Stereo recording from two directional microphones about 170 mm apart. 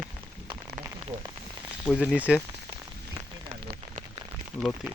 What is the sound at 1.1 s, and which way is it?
Rain on surface, 50° right (ahead or behind).